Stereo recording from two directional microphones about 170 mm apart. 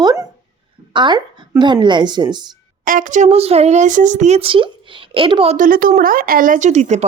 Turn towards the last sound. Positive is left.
turn(degrees=-45)  # may be behind; listen again after turning